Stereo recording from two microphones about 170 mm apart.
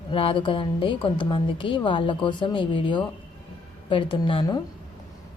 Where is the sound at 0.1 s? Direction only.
30° left (ahead or behind).